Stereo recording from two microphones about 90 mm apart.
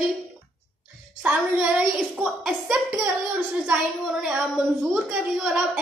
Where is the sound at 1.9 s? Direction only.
Centre (ahead or behind).